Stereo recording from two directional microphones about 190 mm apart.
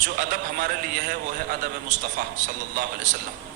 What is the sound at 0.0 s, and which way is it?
A man's voice, 45° right (ahead or behind).